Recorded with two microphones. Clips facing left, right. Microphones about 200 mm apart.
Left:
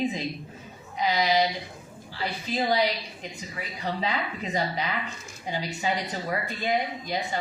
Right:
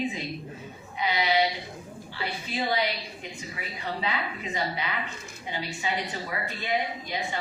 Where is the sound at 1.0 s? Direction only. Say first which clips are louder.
Left 2 dB; 40° left (ahead or behind).